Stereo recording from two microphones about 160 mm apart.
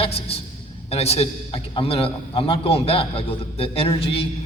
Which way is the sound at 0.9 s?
40° left (ahead or behind).